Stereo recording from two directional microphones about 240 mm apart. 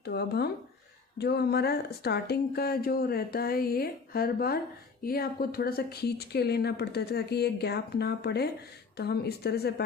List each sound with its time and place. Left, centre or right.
0.0 s speech: left